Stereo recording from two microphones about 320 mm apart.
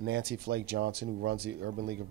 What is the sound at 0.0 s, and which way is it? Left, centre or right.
Speech, right.